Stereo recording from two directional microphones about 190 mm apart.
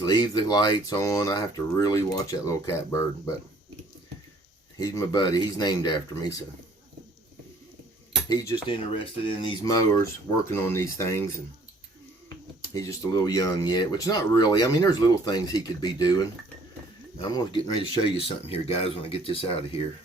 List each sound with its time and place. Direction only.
0.0 s speech: 20° left (ahead or behind)
4.8 s speech: 20° left (ahead or behind)
8.3 s speech: 20° left (ahead or behind)
12.7 s speech: 15° left (ahead or behind)